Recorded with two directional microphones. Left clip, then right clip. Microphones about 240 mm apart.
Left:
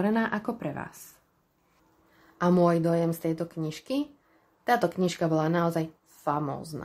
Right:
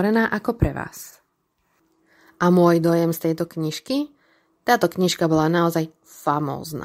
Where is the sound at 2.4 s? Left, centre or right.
Right.